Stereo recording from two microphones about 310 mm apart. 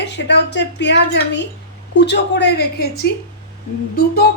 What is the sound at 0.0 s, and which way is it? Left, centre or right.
A woman's voice, left.